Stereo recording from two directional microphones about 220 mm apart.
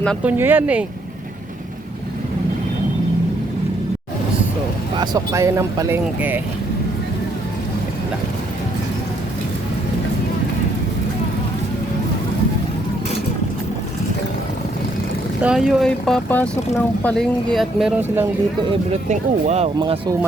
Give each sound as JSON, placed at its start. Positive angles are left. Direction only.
{"t": 0.2, "sound": "speech", "side_deg": -5}
{"t": 4.9, "sound": "speech", "side_deg": -15}
{"t": 15.4, "sound": "speech", "side_deg": -5}
{"t": 18.9, "sound": "speech", "side_deg": -30}